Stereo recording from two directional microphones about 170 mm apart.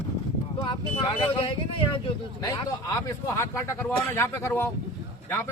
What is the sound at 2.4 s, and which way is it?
Speech, 20° left (ahead or behind).